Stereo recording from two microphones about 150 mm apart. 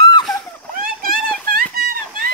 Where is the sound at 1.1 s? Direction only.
5° left (ahead or behind).